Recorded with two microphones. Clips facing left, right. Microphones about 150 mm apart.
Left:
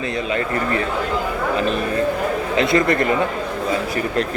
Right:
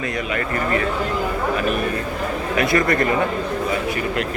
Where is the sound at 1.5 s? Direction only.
30° left (ahead or behind).